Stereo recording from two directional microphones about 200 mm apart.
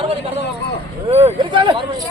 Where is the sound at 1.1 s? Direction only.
30° right (ahead or behind).